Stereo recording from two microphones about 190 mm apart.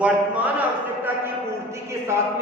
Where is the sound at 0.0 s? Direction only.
5° right (ahead or behind).